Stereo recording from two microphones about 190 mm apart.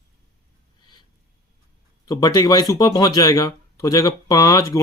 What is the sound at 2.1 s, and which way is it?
Speech, 20° left (ahead or behind).